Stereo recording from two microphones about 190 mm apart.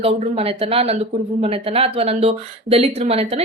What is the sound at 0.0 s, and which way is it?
A woman's voice, 30° right (ahead or behind).